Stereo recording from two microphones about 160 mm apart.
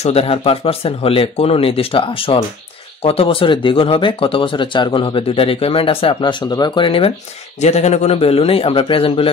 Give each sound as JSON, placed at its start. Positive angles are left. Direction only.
{"t": 0.0, "sound": "speech", "side_deg": 40}